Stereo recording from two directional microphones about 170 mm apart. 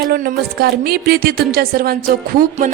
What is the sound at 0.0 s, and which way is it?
A woman's voice, 65° right (ahead or behind).